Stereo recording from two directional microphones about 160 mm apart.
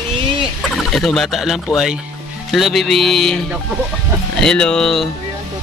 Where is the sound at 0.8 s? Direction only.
Centre (ahead or behind).